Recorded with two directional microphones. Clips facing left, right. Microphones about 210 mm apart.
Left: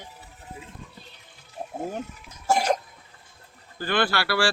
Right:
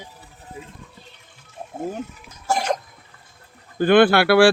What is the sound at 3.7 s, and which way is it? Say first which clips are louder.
Speech: right 11 dB; 55° right (ahead or behind).